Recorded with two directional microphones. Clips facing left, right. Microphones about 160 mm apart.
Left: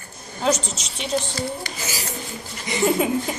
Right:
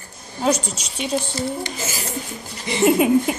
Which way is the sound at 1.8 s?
50° right (ahead or behind).